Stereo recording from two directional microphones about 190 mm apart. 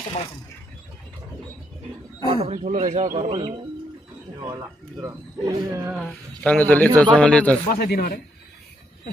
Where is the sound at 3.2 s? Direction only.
30° right (ahead or behind).